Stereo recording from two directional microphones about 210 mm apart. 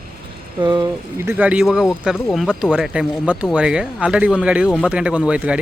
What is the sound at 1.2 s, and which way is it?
A man's voice, 10° right (ahead or behind).